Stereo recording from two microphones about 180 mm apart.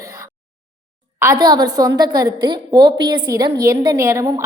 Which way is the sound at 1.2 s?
20° right (ahead or behind).